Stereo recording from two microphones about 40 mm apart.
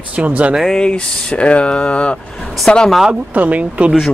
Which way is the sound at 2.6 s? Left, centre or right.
Centre.